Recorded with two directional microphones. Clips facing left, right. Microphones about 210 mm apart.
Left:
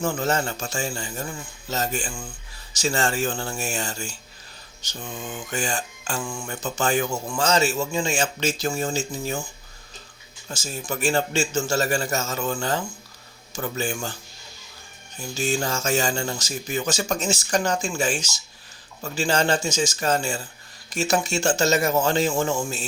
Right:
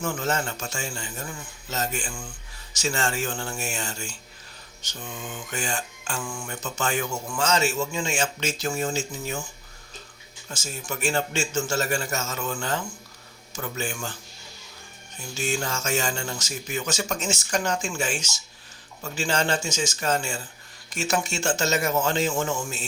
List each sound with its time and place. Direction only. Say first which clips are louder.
0.0 s speech: left 3 dB; 35° left (ahead or behind)
10.5 s speech: left 3 dB; 35° left (ahead or behind)
15.4 s speech: left 3 dB; 35° left (ahead or behind)